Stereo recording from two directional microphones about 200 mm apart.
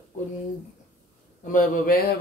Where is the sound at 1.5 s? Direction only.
45° left (ahead or behind).